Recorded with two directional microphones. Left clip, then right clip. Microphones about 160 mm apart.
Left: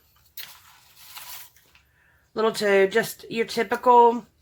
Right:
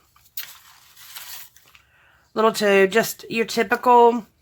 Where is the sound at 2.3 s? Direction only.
30° right (ahead or behind).